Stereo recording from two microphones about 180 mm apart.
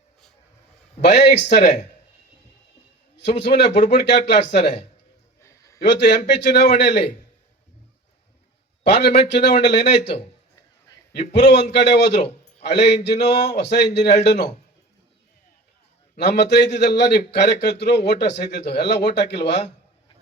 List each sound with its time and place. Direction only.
1.4 s a man's voice: 70° left (ahead or behind)
3.2 s a man's voice: 75° left (ahead or behind)
5.4 s a sound: 15° left (ahead or behind)
5.8 s a man's voice: 75° left (ahead or behind)
8.8 s a man's voice: 70° left (ahead or behind)
16.1 s a man's voice: 70° left (ahead or behind)